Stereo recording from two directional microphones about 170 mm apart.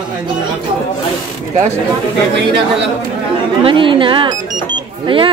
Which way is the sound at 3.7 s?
30° right (ahead or behind).